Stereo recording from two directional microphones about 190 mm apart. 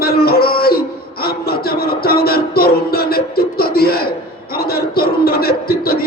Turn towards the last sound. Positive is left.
turn(degrees=50)  # may be behind; listen again after turning